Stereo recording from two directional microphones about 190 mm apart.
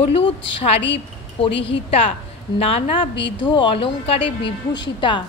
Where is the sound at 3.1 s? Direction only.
70° left (ahead or behind).